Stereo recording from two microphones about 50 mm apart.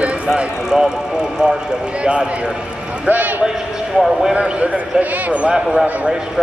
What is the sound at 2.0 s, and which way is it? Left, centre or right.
Speech, centre.